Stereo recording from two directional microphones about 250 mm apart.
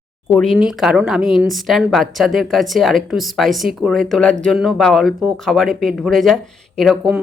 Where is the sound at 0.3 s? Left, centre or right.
Centre.